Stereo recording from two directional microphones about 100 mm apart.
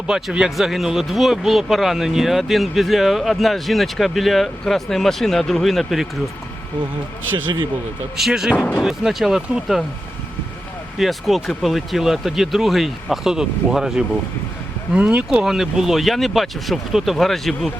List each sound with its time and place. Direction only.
0.1 s speech: 5° right (ahead or behind)
8.1 s speech: 5° right (ahead or behind)
8.5 s speech: 15° left (ahead or behind)
8.8 s speech: 5° right (ahead or behind)
10.9 s speech: centre (ahead or behind)